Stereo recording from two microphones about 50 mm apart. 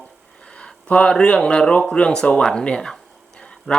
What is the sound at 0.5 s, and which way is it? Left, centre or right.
Speech, left.